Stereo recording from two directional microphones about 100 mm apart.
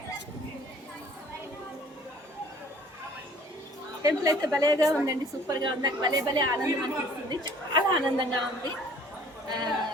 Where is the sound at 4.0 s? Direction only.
35° right (ahead or behind).